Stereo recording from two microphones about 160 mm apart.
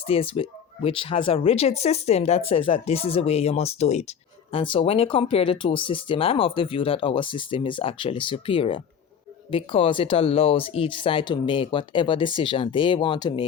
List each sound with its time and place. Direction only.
0.1 s speech: 35° left (ahead or behind)
4.5 s speech: 35° left (ahead or behind)